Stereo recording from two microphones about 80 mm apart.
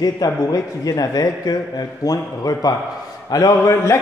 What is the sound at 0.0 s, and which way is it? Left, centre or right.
A man's voice, left.